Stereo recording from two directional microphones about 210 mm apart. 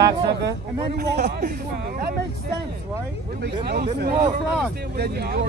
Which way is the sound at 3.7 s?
50° right (ahead or behind).